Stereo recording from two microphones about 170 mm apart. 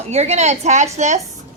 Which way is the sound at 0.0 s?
40° right (ahead or behind).